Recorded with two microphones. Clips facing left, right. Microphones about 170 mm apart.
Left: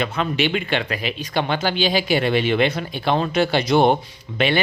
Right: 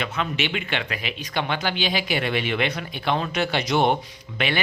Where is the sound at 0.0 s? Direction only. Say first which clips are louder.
Left 5 dB; 35° left (ahead or behind).